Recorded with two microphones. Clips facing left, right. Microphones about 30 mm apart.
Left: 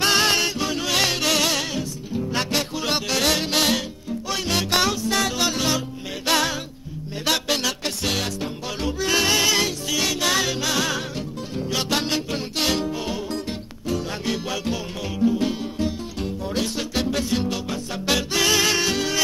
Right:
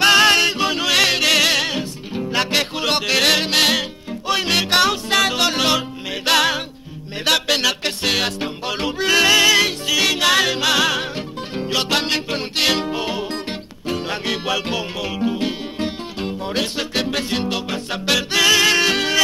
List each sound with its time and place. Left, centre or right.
0.0 s music: right
3.1 s music: right
5.4 s music: right